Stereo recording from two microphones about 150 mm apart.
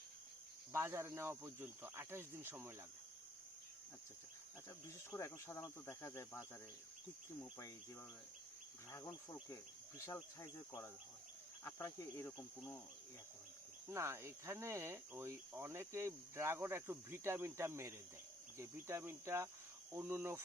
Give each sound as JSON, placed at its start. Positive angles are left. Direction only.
{"t": 0.7, "sound": "speech", "side_deg": -15}
{"t": 5.1, "sound": "speech", "side_deg": 15}
{"t": 8.9, "sound": "speech", "side_deg": 20}
{"t": 13.8, "sound": "speech", "side_deg": -20}